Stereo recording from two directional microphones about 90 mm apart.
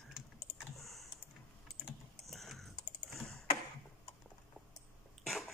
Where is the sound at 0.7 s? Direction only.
Centre (ahead or behind).